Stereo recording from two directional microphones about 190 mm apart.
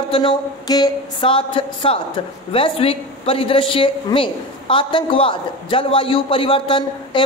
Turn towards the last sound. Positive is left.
turn(degrees=25)  # may be behind; listen again after turning